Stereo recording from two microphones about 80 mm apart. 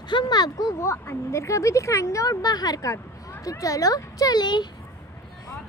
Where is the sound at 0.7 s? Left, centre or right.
Left.